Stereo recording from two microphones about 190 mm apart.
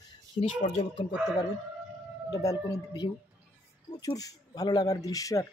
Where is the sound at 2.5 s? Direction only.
20° left (ahead or behind).